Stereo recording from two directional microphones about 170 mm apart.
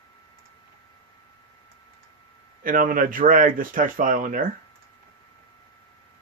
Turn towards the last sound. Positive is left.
turn(degrees=-55)  # may be behind; listen again after turning